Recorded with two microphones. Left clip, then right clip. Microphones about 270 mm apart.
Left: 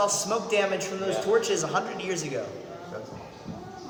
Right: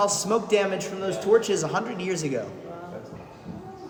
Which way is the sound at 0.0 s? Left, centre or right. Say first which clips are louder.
Right 2 dB; right.